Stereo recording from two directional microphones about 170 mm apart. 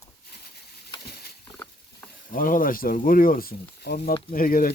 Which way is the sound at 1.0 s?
65° left (ahead or behind).